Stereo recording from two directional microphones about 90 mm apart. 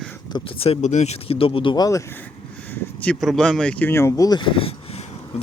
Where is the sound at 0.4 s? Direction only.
90° left.